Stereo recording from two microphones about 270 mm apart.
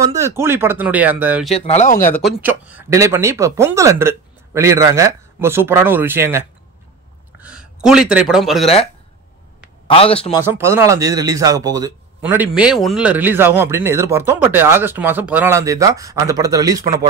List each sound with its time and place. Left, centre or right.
0.0 s speech: centre
1.5 s speech: left
2.0 s speech: centre
2.4 s speech: centre
7.4 s a man's voice: centre
9.8 s speech: left
10.4 s speech: centre